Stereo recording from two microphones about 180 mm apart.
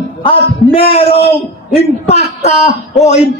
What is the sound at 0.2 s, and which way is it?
A man's voice, 30° left (ahead or behind).